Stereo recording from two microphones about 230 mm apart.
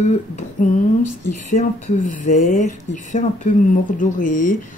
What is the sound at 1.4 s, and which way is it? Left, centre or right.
Speech, left.